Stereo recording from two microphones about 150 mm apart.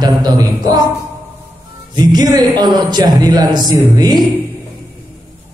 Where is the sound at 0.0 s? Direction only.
25° right (ahead or behind).